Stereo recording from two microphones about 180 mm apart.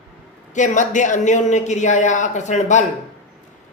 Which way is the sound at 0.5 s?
45° left (ahead or behind).